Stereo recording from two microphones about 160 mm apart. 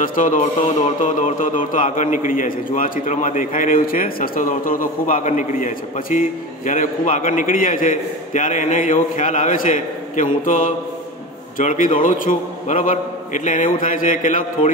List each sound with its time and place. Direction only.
0.0 s a man's voice: 55° left (ahead or behind)